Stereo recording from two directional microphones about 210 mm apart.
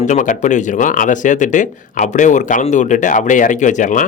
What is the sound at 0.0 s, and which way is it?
Speech, 35° left (ahead or behind).